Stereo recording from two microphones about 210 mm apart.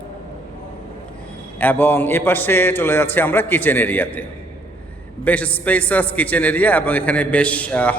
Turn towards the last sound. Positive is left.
turn(degrees=5)  # may be behind; listen again after turning